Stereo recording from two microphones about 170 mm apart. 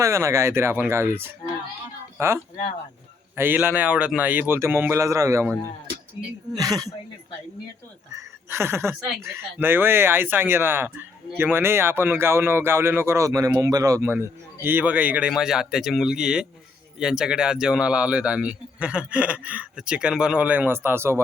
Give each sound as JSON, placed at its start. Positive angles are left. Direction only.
{"t": 0.0, "sound": "speech", "side_deg": -15}
{"t": 8.1, "sound": "speech", "side_deg": -15}